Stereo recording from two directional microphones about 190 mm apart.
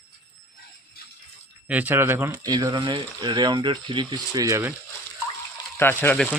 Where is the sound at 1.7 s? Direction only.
10° right (ahead or behind).